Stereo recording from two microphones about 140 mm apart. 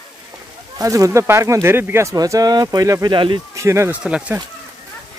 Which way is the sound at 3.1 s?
35° right (ahead or behind).